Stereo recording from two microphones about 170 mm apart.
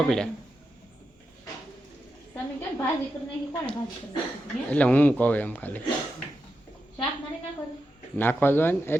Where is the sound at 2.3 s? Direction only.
15° left (ahead or behind).